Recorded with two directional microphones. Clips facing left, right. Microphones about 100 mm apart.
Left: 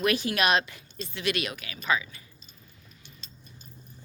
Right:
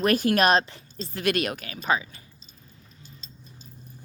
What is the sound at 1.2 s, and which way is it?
Speech, 50° right (ahead or behind).